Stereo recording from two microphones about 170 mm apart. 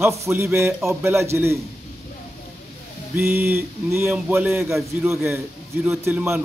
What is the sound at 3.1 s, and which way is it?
A man's voice, 15° right (ahead or behind).